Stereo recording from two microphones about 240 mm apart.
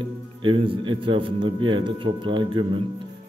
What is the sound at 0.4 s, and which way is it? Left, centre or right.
Speech, right.